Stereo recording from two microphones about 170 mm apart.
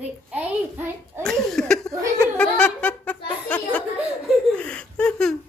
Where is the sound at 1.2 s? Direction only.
5° left (ahead or behind).